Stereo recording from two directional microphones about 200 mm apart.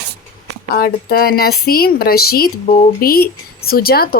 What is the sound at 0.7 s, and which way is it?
Speech, 50° left (ahead or behind).